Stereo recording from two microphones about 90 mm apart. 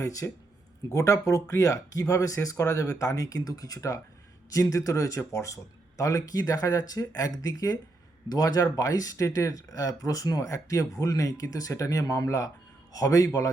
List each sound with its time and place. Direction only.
0.0 s speech: 40° left (ahead or behind)